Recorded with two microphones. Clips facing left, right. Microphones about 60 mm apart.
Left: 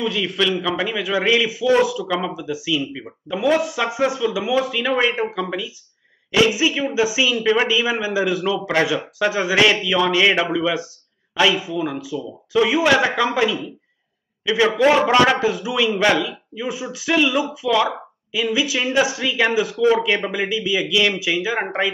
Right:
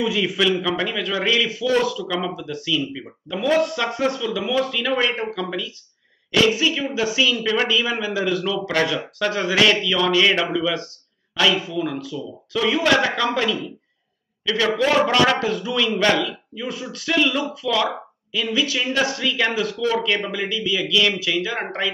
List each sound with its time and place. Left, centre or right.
0.0 s a man's voice: centre